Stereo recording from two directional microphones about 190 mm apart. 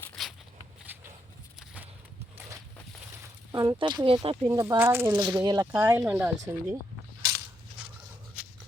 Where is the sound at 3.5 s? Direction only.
20° right (ahead or behind).